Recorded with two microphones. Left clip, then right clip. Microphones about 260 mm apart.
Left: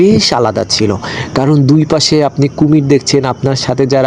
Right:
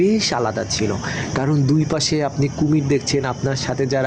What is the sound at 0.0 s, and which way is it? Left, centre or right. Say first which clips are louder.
Speech: left 9 dB; left.